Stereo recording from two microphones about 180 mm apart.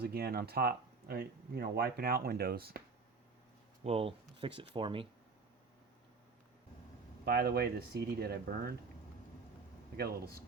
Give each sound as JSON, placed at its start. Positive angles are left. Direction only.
{"t": 0.0, "sound": "speech", "side_deg": -60}
{"t": 3.8, "sound": "speech", "side_deg": -30}
{"t": 7.3, "sound": "speech", "side_deg": -60}
{"t": 10.0, "sound": "speech", "side_deg": -60}